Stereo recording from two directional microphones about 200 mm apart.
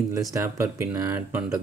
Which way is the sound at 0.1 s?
15° right (ahead or behind).